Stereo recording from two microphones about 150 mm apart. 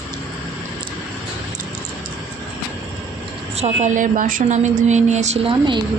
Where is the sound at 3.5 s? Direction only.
50° right (ahead or behind).